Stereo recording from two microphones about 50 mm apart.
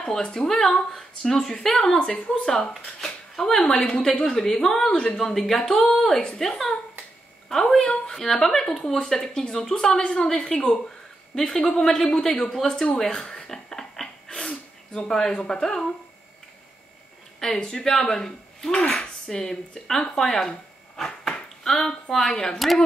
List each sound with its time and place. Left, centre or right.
0.0 s a woman's voice: centre
12.0 s a sound: centre
15.0 s a woman's voice: centre
17.4 s a man's voice: centre
18.8 s speech: left
19.2 s a woman's voice: centre
20.2 s a sound: centre
21.7 s a woman's voice: centre
22.6 s speech: centre